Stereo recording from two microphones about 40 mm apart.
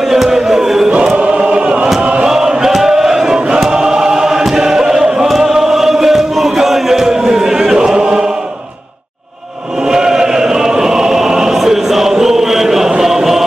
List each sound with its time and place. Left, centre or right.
0.1 s music: centre
1.1 s choir: right
2.2 s choir: centre
9.8 s choir: centre